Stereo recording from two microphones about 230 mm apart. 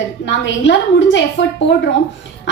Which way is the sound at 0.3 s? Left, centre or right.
Left.